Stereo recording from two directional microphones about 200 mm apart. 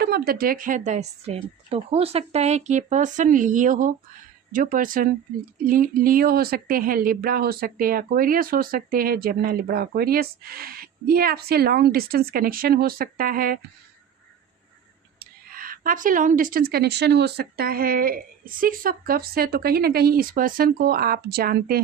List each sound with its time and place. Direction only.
0.0 s speech: 50° right (ahead or behind)
15.2 s speech: 45° right (ahead or behind)